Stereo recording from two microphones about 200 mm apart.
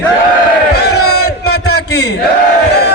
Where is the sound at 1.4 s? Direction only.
50° left (ahead or behind).